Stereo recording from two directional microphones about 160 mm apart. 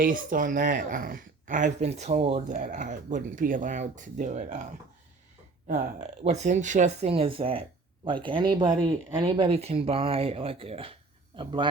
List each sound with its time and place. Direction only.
0.0 s speech: 60° right (ahead or behind)
5.6 s speech: 50° right (ahead or behind); by 11.7 s 30° right (ahead or behind)